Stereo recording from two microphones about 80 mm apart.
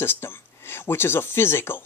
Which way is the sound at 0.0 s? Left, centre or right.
Left.